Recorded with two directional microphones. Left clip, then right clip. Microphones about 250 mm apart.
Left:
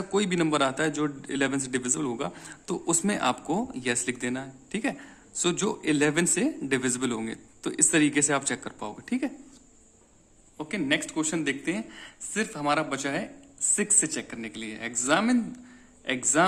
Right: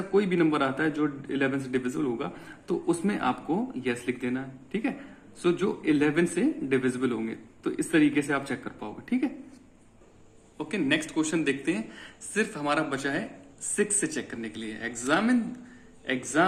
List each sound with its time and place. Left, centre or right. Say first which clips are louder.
0.1 s a man's voice: right 1 dB; left
10.6 s a man's voice: even; left